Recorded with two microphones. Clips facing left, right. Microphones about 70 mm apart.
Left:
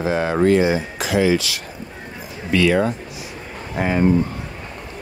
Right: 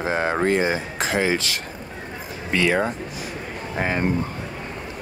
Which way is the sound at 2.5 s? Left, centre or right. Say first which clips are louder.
Left 4 dB; right.